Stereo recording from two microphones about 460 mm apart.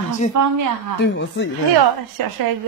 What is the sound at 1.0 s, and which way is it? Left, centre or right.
Speech, left.